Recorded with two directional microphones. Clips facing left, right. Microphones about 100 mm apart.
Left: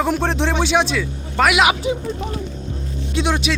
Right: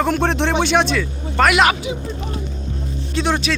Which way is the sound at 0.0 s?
5° left (ahead or behind).